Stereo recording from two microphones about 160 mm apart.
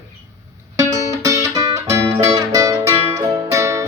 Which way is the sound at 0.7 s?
20° right (ahead or behind).